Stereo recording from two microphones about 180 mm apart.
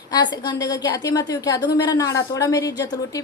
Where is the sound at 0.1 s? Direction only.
20° left (ahead or behind).